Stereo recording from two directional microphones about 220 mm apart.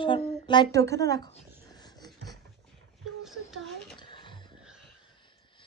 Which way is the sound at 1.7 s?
20° left (ahead or behind).